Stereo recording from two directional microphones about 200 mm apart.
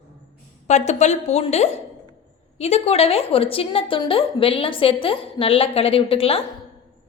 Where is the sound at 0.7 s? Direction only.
35° left (ahead or behind).